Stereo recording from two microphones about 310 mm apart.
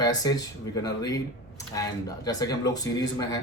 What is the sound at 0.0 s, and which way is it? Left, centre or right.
Speech, centre.